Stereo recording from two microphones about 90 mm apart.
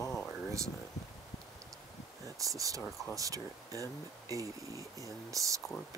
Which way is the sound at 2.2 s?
40° right (ahead or behind).